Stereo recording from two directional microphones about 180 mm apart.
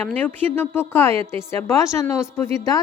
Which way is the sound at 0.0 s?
10° left (ahead or behind).